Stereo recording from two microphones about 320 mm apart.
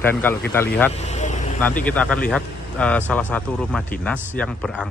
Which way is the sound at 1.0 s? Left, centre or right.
Left.